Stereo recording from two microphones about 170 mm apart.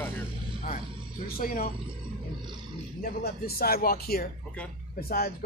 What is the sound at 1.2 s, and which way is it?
Speech, 55° left (ahead or behind).